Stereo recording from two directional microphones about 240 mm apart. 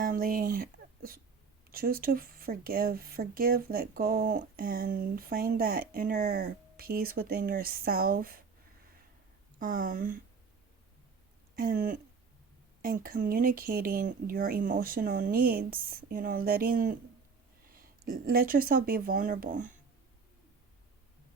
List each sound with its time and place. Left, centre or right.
0.0 s speech: right
9.6 s speech: right
11.5 s speech: right